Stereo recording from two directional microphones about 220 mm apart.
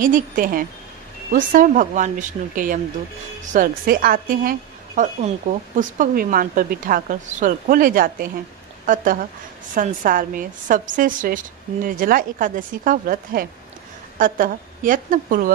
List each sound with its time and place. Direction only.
0.0 s a woman's voice: 40° right (ahead or behind)